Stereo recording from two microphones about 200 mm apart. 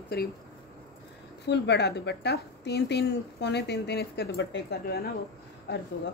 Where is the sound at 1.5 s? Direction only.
55° left (ahead or behind).